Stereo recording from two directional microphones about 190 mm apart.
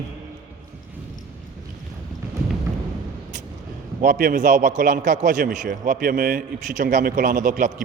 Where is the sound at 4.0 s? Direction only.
45° right (ahead or behind).